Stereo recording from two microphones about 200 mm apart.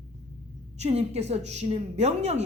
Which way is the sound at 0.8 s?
30° right (ahead or behind).